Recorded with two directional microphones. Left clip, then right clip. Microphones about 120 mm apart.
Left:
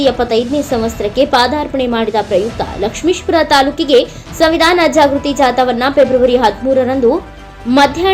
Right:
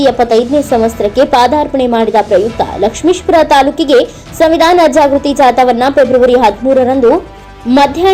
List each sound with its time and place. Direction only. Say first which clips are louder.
0.0 s a woman's voice: right 4 dB; 15° right (ahead or behind)